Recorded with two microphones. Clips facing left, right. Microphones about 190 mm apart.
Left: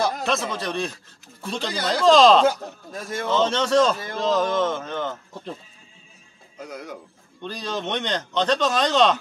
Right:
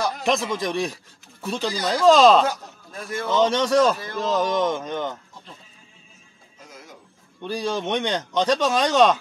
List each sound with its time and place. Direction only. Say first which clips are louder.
0.2 s speech: right 2 dB; 15° right (ahead or behind)
6.6 s speech: left 10 dB; 65° left (ahead or behind)
7.4 s speech: right 3 dB; 10° right (ahead or behind)